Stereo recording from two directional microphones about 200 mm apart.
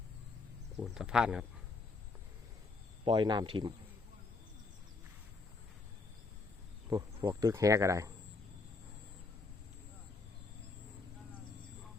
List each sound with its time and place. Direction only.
0.8 s speech: 5° right (ahead or behind)
3.0 s speech: 25° right (ahead or behind)
6.9 s speech: 20° right (ahead or behind)